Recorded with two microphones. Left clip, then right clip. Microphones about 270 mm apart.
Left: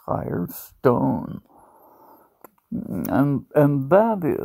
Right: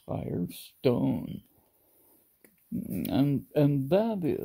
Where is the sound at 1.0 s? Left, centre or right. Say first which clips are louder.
Left 7 dB; left.